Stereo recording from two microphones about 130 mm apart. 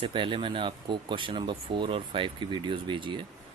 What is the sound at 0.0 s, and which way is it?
Speech, 40° right (ahead or behind).